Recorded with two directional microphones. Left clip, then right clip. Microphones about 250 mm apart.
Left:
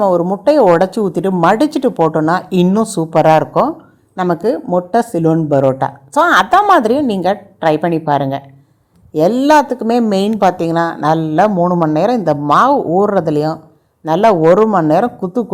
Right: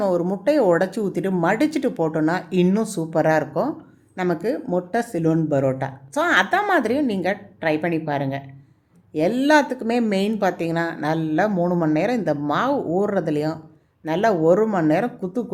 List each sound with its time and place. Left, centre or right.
0.0 s a woman's voice: centre